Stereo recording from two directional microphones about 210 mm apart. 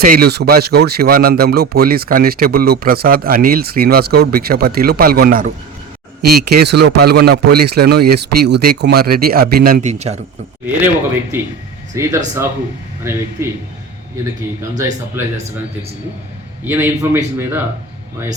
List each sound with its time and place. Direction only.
0.0 s speech: 45° right (ahead or behind)
10.8 s speech: 10° right (ahead or behind)
16.6 s speech: 10° right (ahead or behind)